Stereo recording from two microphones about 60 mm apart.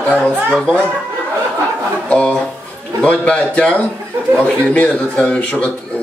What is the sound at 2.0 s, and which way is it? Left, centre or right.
Speech, centre.